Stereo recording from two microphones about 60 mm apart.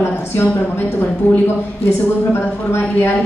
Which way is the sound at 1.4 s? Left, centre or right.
Left.